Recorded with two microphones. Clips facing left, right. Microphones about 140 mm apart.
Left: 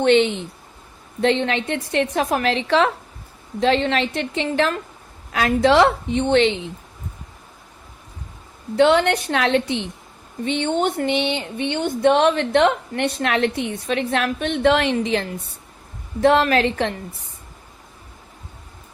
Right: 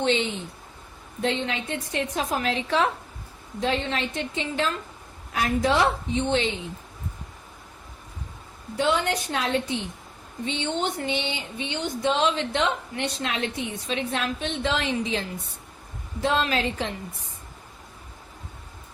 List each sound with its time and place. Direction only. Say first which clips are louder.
0.0 s a woman's voice: left 8 dB; 65° left (ahead or behind)
5.3 s a woman's voice: left 7 dB; 90° left; by 6.6 s 70° left (ahead or behind)
8.7 s a woman's voice: left 8 dB; 70° left (ahead or behind)
10.4 s speech: left 7 dB; 60° left (ahead or behind)